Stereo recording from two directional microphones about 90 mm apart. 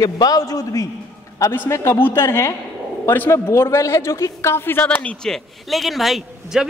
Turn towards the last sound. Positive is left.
turn(degrees=0)  # may be behind; listen again after turning